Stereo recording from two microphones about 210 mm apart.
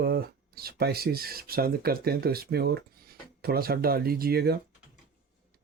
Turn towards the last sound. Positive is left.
turn(degrees=-50)  # may be behind; listen again after turning